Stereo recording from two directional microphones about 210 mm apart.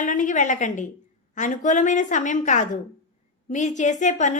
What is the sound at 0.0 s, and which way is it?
A woman's voice, 40° left (ahead or behind).